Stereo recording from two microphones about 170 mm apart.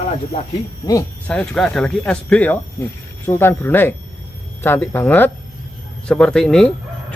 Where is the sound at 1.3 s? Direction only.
5° left (ahead or behind).